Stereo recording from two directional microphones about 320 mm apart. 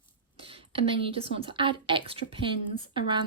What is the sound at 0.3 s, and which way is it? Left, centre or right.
A woman's voice, centre.